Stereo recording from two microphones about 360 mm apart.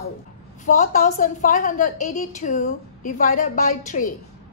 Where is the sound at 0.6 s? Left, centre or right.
Left.